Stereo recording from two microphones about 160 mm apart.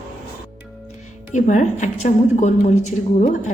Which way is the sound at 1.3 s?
50° left (ahead or behind).